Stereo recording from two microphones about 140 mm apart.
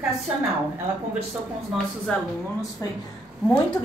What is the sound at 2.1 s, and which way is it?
Speech, 10° left (ahead or behind).